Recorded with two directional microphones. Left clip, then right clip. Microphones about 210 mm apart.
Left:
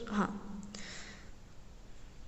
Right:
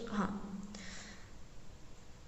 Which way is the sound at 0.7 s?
50° left (ahead or behind).